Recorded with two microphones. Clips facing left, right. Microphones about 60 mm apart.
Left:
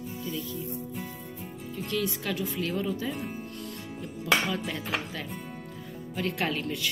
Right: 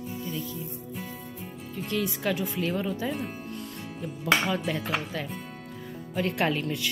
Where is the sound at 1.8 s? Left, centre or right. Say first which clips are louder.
Right 1 dB; centre.